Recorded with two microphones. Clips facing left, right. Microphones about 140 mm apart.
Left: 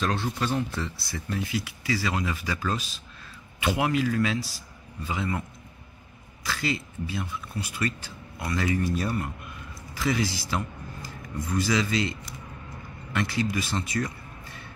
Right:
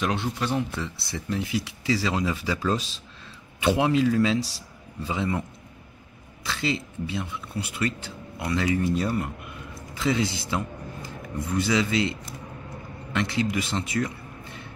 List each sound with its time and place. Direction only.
0.0 s speech: 20° right (ahead or behind)
5.1 s speech: 25° right (ahead or behind)
6.4 s speech: 20° right (ahead or behind)